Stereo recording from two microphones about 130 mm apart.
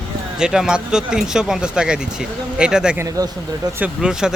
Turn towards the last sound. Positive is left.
turn(degrees=-5)  # may be behind; listen again after turning